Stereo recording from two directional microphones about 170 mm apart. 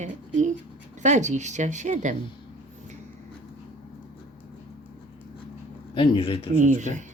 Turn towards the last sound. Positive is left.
turn(degrees=-45)  # may be behind; listen again after turning